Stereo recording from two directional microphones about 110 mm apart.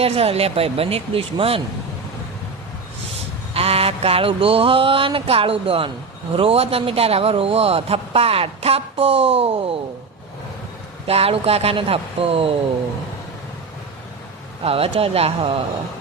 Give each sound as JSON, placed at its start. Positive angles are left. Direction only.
{"t": 0.0, "sound": "a man's voice", "side_deg": -65}
{"t": 3.5, "sound": "a man's voice", "side_deg": -65}
{"t": 11.0, "sound": "a man's voice", "side_deg": -60}
{"t": 14.6, "sound": "a man's voice", "side_deg": -60}